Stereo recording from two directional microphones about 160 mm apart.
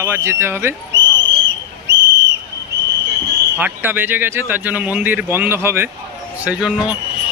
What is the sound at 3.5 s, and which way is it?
A man's voice, 10° right (ahead or behind).